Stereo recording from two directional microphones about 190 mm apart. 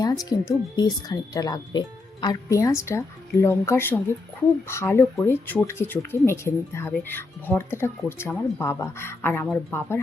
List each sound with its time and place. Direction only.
0.0 s speech: 20° left (ahead or behind)